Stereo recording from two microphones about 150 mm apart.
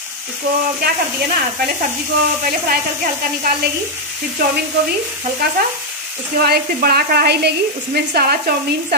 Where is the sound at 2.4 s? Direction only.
70° right (ahead or behind).